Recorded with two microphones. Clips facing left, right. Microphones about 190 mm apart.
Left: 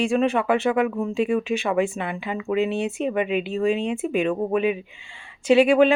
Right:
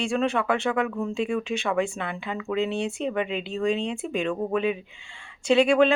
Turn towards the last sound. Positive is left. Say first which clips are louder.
# left 3 dB
turn(degrees=10)  # may be behind; listen again after turning